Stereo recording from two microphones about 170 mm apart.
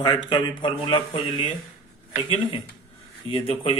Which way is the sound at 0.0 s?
25° left (ahead or behind).